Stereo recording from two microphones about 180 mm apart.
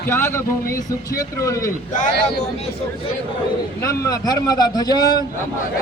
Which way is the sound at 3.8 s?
20° left (ahead or behind).